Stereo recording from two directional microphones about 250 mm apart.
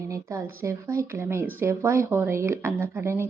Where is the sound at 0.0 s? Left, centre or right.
Centre.